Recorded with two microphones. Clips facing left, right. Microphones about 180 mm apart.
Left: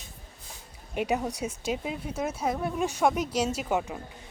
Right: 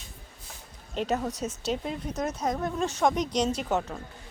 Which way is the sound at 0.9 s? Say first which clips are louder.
Even; 15° left (ahead or behind).